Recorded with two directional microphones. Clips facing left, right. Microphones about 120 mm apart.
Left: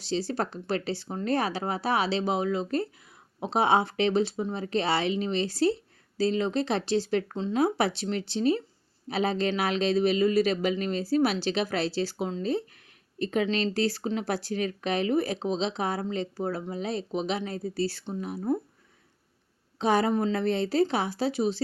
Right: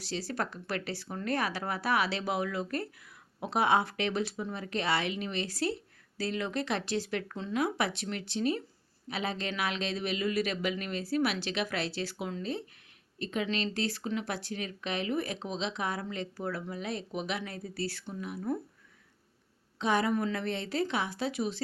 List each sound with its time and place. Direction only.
0.0 s speech: 25° left (ahead or behind)
19.8 s speech: 35° left (ahead or behind)